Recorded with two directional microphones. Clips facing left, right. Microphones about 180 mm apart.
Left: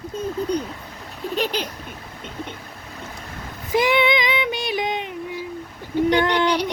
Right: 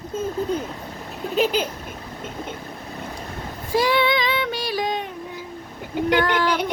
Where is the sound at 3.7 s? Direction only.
20° left (ahead or behind).